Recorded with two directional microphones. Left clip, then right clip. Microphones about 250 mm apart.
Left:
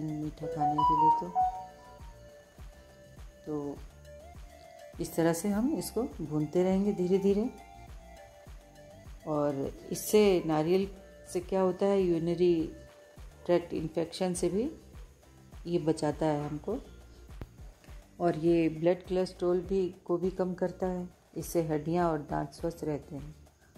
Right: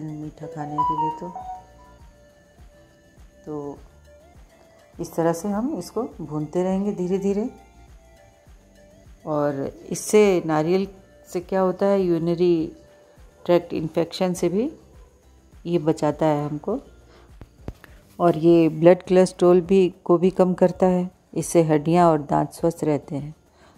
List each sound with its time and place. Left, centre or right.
0.0 s speech: centre
3.4 s a woman's voice: centre
5.1 s a woman's voice: centre
9.3 s a woman's voice: centre
18.1 s speech: centre